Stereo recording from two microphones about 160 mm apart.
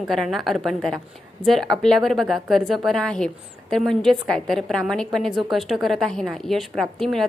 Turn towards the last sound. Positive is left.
turn(degrees=0)  # may be behind; listen again after turning